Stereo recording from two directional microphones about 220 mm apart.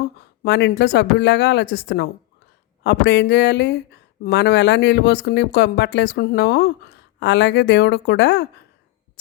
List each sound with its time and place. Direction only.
0.4 s speech: 50° left (ahead or behind)